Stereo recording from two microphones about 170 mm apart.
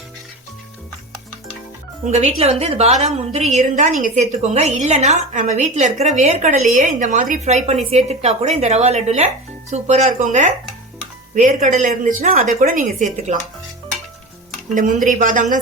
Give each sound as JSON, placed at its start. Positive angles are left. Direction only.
{"t": 2.0, "sound": "a woman's voice", "side_deg": -40}
{"t": 14.8, "sound": "a woman's voice", "side_deg": -50}